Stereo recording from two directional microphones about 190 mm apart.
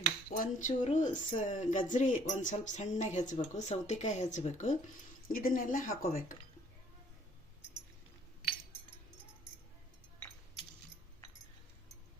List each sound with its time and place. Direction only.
0.3 s a woman's voice: 40° left (ahead or behind)